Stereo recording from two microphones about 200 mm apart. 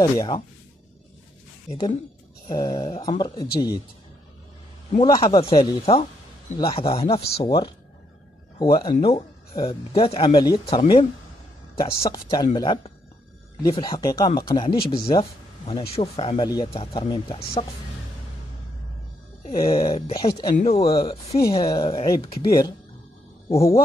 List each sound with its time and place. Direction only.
0.0 s speech: 20° left (ahead or behind)
2.4 s speech: 20° left (ahead or behind)
5.0 s speech: 20° left (ahead or behind)
19.6 s speech: 20° left (ahead or behind)
20.5 s speech: 30° left (ahead or behind)